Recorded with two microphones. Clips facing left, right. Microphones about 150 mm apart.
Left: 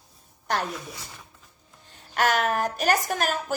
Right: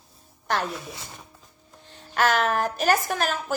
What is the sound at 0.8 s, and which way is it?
Speech, 25° right (ahead or behind).